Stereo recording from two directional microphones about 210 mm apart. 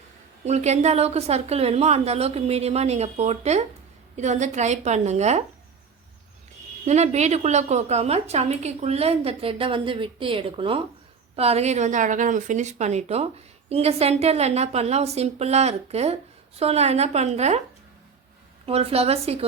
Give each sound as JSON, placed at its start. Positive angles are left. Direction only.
{"t": 0.4, "sound": "a woman's voice", "side_deg": -30}
{"t": 6.8, "sound": "a woman's voice", "side_deg": -30}
{"t": 18.6, "sound": "a woman's voice", "side_deg": -30}